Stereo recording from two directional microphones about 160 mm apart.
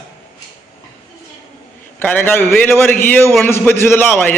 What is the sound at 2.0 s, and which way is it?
Speech, 10° left (ahead or behind).